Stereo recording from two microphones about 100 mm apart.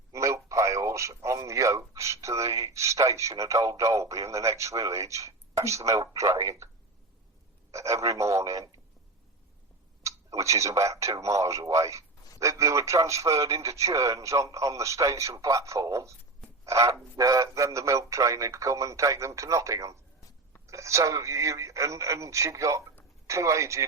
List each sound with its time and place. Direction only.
0.1 s speech: 30° right (ahead or behind)
7.7 s a man's voice: 30° right (ahead or behind)
10.0 s a man's voice: 35° right (ahead or behind)